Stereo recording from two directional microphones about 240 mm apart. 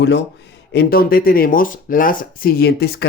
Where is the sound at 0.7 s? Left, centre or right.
Left.